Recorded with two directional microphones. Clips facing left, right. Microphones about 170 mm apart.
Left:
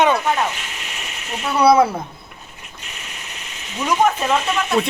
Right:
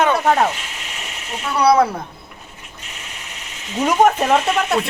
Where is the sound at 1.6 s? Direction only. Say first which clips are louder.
Left 1 dB; 5° left (ahead or behind).